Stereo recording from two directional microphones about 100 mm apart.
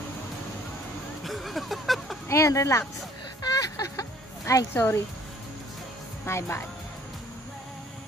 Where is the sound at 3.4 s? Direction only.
35° left (ahead or behind).